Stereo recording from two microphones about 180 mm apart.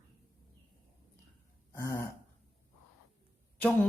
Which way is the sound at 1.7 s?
15° left (ahead or behind).